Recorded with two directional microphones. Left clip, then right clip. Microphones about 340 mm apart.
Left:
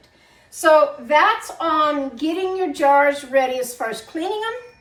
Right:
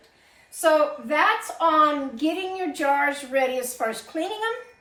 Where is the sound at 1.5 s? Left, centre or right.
Centre.